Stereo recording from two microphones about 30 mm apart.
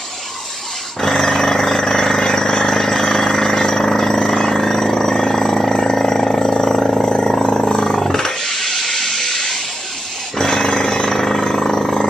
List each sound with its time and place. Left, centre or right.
1.0 s vehicle: centre
8.0 s a sound: centre
10.3 s jackhammer: left